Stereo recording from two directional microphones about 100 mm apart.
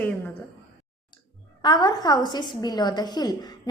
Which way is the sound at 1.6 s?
50° left (ahead or behind).